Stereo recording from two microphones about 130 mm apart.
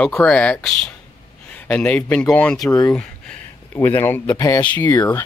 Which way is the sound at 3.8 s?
15° left (ahead or behind).